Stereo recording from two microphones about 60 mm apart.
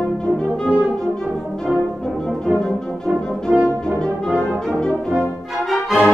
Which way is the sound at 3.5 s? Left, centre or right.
Right.